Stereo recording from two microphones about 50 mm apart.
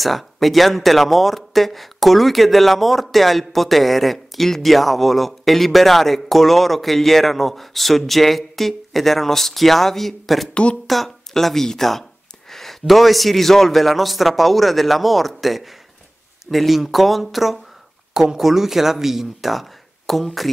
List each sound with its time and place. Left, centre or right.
0.0 s speech: centre
10.5 s speech: left
10.9 s speech: centre